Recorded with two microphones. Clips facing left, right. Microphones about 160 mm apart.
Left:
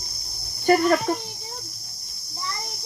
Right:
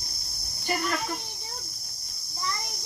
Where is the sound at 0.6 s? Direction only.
55° left (ahead or behind).